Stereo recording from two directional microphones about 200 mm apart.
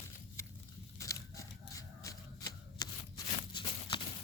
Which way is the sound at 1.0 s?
15° left (ahead or behind).